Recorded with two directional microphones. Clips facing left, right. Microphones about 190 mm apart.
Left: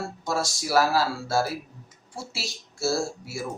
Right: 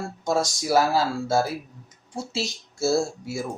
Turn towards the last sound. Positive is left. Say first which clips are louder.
# right 4 dB
turn(degrees=-20)  # may be behind; listen again after turning